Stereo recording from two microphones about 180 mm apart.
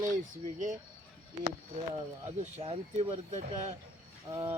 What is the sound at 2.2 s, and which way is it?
Speech, 35° right (ahead or behind).